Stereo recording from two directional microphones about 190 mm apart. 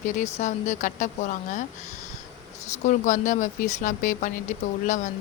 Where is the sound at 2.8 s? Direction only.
40° left (ahead or behind).